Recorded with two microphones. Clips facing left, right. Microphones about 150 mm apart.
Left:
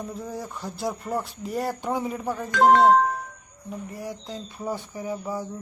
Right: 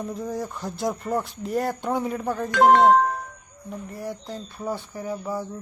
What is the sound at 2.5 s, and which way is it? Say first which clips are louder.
Speech: right 1 dB; 65° right (ahead or behind).